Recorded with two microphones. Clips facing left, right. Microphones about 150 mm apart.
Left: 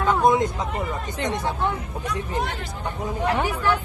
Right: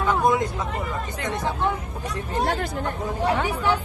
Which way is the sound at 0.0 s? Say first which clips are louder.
Left 2 dB; 20° left (ahead or behind).